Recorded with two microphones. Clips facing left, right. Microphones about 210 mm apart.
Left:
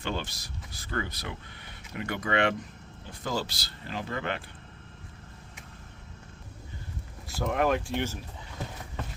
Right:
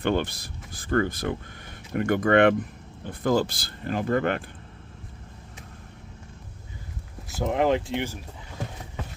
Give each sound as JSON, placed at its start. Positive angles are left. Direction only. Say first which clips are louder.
{"t": 0.0, "sound": "speech", "louder": "right 9 dB", "side_deg": -55}
{"t": 7.3, "sound": "speech", "louder": "right 4 dB", "side_deg": -20}